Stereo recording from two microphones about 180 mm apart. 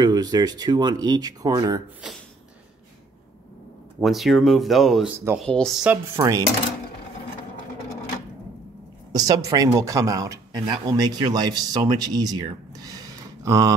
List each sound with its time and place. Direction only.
0.0 s speech: 20° right (ahead or behind)
4.0 s speech: centre (ahead or behind)
6.1 s speech: 20° right (ahead or behind)
9.1 s speech: 20° right (ahead or behind)